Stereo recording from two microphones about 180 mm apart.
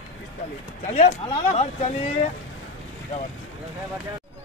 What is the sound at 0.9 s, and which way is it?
Speech, 35° left (ahead or behind).